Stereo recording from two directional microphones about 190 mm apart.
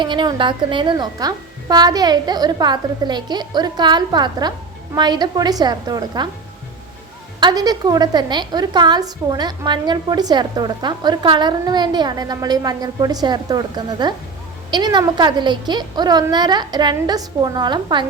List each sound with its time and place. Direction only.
0.0 s a woman's voice: 25° right (ahead or behind)
7.3 s a woman's voice: 20° right (ahead or behind)